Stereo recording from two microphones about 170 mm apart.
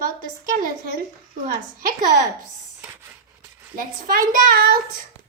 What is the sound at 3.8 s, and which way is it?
A child's voice, 55° right (ahead or behind).